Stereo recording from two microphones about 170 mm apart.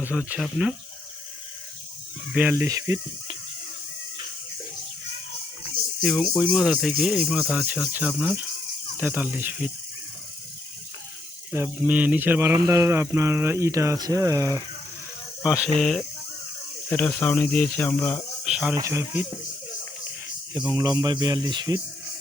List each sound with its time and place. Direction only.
0.0 s speech: 5° right (ahead or behind)
2.3 s speech: 10° right (ahead or behind)
6.0 s speech: centre (ahead or behind)
11.5 s speech: 10° right (ahead or behind)
15.4 s speech: 5° right (ahead or behind); by 18.2 s 10° left (ahead or behind)
18.4 s snake: 5° right (ahead or behind)
18.7 s speech: 15° right (ahead or behind)
20.5 s speech: 20° right (ahead or behind)